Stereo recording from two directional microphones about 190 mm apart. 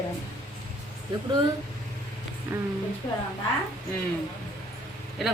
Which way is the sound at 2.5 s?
10° right (ahead or behind).